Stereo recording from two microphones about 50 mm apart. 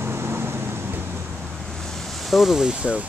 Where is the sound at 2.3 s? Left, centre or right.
Centre.